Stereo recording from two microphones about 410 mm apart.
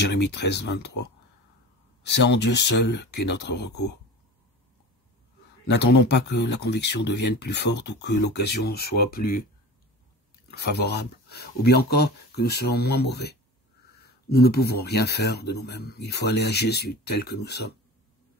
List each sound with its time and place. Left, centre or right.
0.0 s speech: left
2.0 s speech: left
5.7 s speech: left
10.5 s speech: left